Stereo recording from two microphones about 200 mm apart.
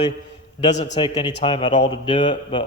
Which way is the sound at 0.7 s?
35° left (ahead or behind).